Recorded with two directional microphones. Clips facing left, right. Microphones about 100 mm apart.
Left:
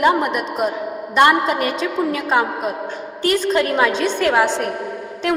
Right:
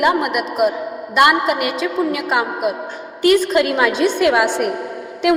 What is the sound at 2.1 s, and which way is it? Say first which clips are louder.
A woman's voice: left 1 dB; 35° left (ahead or behind).